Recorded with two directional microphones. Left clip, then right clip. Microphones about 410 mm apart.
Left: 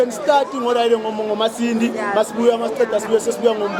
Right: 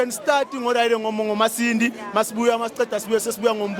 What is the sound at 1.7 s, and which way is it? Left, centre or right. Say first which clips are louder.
Speech: left 1 dB; right.